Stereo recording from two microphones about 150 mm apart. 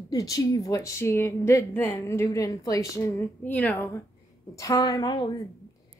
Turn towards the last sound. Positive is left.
turn(degrees=30)  # may be behind; listen again after turning